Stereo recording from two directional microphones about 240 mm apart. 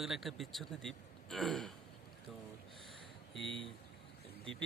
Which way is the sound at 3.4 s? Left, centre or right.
Right.